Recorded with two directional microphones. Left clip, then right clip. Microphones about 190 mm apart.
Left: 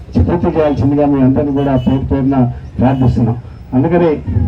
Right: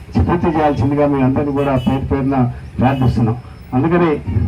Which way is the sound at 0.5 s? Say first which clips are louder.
Left 4 dB; 30° right (ahead or behind).